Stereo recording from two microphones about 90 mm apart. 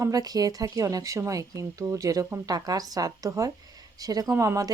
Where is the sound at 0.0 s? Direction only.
45° right (ahead or behind).